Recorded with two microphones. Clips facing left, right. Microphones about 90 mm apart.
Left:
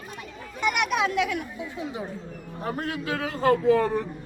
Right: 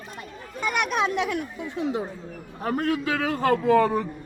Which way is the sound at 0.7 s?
35° right (ahead or behind).